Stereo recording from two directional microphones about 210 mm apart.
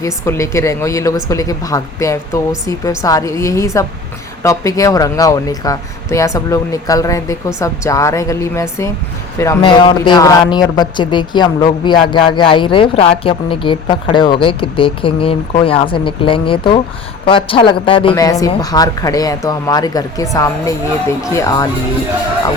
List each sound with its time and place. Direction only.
0.0 s speech: 15° left (ahead or behind)